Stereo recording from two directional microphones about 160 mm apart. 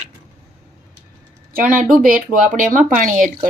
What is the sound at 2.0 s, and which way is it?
Speech, 60° right (ahead or behind).